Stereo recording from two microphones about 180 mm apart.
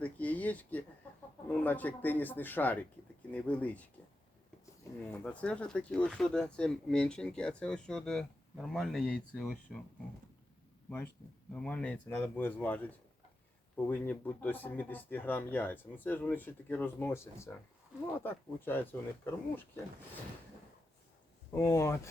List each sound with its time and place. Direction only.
0.0 s a sound: 10° left (ahead or behind)
1.5 s speech: 10° left (ahead or behind)
5.1 s speech: 5° left (ahead or behind)
10.8 s speech: 10° left (ahead or behind)
21.5 s speech: 15° left (ahead or behind)